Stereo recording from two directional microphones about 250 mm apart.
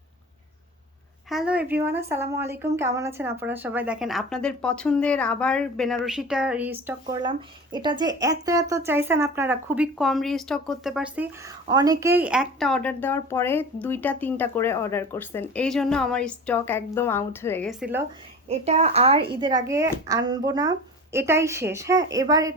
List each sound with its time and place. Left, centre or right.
1.3 s speech: centre
18.4 s speech: right